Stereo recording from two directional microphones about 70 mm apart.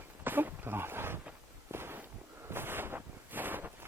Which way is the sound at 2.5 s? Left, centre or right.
Right.